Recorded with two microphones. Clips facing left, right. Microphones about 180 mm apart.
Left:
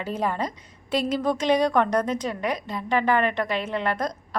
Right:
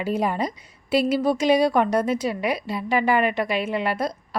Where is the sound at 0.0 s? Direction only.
10° right (ahead or behind).